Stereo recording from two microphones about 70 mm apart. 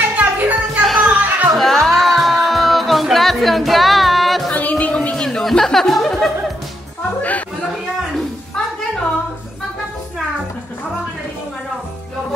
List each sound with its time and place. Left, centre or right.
0.2 s a sound: right
0.8 s music: centre
1.1 s music: right
1.6 s music: centre
4.6 s music: left
5.1 s music: centre
7.2 s a sound: left